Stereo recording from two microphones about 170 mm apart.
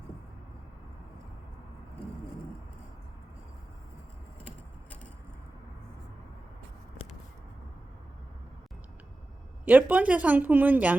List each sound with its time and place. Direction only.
9.6 s speech: 10° right (ahead or behind)